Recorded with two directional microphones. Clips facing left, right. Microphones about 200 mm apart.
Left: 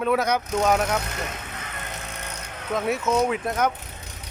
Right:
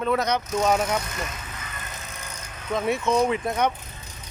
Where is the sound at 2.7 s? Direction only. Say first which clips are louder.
Even; centre (ahead or behind).